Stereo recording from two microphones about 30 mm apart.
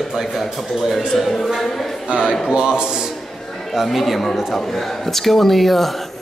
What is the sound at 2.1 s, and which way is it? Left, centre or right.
Speech, right.